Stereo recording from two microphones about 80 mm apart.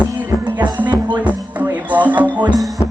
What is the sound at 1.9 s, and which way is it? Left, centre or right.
Music, centre.